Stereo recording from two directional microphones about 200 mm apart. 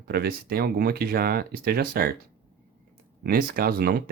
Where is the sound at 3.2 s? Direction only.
50° right (ahead or behind).